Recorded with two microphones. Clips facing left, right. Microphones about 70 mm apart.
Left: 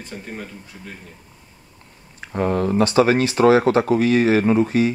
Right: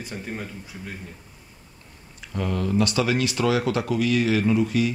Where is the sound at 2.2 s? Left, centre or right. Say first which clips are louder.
Left 7 dB; left.